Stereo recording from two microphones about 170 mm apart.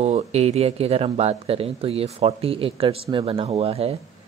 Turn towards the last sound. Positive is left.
turn(degrees=-35)  # may be behind; listen again after turning